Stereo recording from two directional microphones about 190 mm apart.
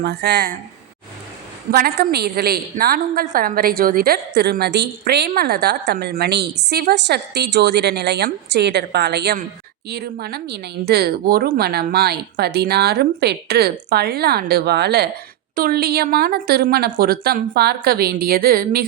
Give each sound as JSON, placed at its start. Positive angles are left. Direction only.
{"t": 0.0, "sound": "a woman's voice", "side_deg": -60}
{"t": 1.7, "sound": "a woman's voice", "side_deg": -50}